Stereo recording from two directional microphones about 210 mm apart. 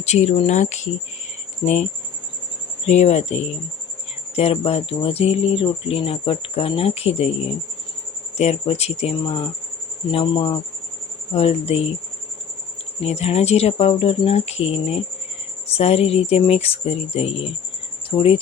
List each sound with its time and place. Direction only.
0.0 s speech: 30° left (ahead or behind)
8.4 s speech: 30° left (ahead or behind)
13.0 s speech: 30° left (ahead or behind)